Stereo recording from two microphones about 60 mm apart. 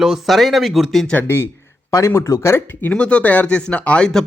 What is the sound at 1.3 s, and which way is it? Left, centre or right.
Speech, left.